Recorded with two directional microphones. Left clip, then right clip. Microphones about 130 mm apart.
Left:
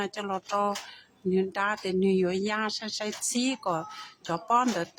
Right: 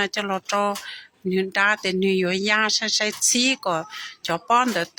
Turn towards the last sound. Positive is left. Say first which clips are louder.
# right 6 dB
turn(degrees=-10)  # may be behind; listen again after turning